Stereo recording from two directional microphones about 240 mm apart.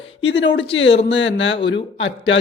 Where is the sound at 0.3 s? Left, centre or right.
Left.